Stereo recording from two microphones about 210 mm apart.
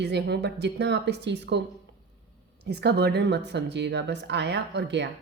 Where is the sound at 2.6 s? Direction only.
50° right (ahead or behind).